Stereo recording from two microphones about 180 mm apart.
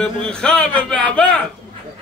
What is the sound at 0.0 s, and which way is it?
Speech, 5° left (ahead or behind).